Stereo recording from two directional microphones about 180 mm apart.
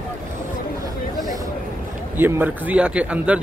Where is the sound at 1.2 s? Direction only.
20° right (ahead or behind).